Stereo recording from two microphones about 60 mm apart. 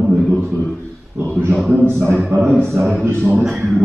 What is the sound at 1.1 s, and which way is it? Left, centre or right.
Speech, centre.